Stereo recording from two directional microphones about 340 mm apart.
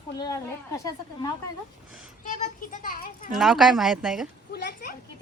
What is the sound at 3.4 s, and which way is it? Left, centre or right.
Speech, centre.